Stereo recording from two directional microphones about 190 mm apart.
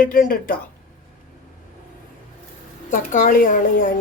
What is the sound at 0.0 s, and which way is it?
Speech, 45° left (ahead or behind).